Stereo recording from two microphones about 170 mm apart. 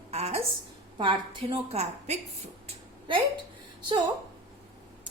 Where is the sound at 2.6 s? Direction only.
30° right (ahead or behind).